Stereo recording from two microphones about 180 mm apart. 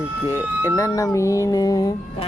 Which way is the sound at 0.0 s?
10° right (ahead or behind).